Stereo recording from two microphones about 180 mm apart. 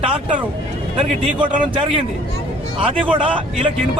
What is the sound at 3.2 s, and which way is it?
Speech, 30° right (ahead or behind).